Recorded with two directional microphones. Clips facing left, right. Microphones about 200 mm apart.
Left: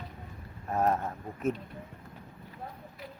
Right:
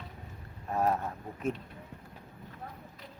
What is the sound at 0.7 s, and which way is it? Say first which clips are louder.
Speech: left 1 dB; centre (ahead or behind).